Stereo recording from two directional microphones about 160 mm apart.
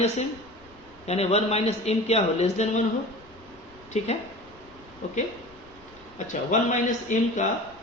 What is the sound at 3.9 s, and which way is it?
Speech, 45° left (ahead or behind).